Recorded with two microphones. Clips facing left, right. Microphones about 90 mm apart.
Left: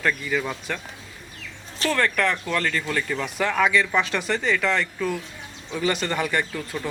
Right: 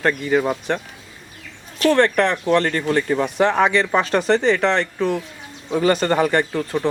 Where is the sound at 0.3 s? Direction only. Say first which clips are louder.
Right 8 dB; 35° right (ahead or behind).